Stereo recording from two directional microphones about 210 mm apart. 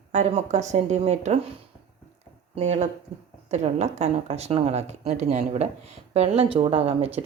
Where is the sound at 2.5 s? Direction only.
35° right (ahead or behind).